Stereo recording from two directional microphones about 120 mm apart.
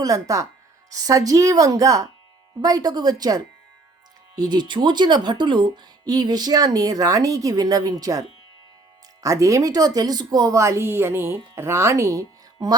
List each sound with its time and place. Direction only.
0.0 s speech: 30° right (ahead or behind)
9.2 s speech: 25° right (ahead or behind)